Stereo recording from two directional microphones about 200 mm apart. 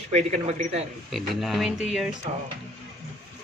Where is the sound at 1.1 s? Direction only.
Centre (ahead or behind).